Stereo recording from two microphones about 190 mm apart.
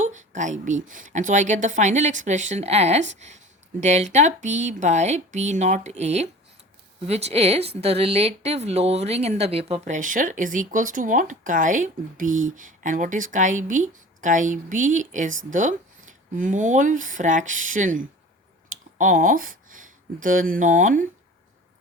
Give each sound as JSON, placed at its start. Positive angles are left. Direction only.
{"t": 0.0, "sound": "speech", "side_deg": -40}